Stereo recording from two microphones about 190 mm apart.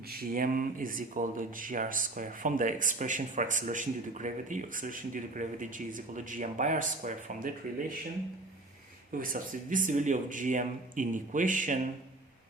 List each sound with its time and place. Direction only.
0.1 s speech: 50° right (ahead or behind)
9.1 s speech: 45° right (ahead or behind)